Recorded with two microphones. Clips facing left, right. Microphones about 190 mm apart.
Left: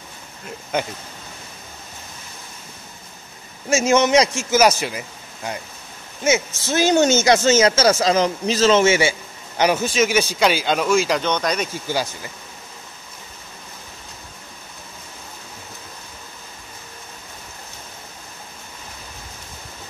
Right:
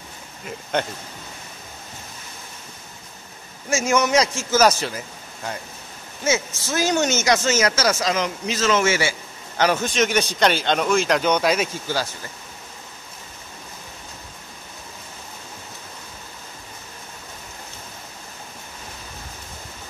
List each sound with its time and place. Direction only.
0.5 s speech: 5° left (ahead or behind)
3.7 s a man's voice: 25° left (ahead or behind)
6.2 s speech: 20° left (ahead or behind)
9.6 s speech: 10° left (ahead or behind)
11.9 s a man's voice: 15° left (ahead or behind)